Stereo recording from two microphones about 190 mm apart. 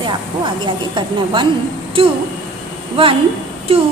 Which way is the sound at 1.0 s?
25° right (ahead or behind).